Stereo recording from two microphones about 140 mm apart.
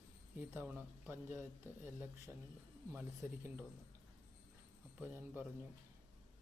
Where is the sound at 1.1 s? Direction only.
15° right (ahead or behind).